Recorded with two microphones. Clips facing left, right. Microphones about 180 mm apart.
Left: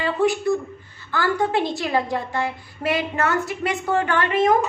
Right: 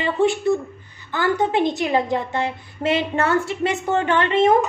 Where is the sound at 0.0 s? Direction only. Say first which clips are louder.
Right 1 dB; 25° right (ahead or behind).